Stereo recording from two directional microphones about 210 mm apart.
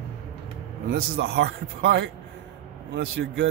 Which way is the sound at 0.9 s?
50° right (ahead or behind).